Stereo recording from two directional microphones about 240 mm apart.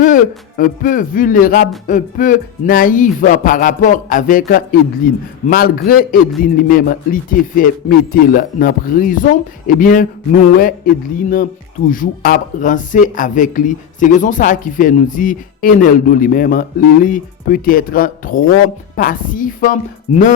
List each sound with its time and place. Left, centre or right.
0.0 s speech: left